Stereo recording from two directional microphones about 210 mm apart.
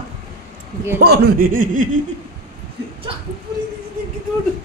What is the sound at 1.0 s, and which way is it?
Speech, 50° right (ahead or behind).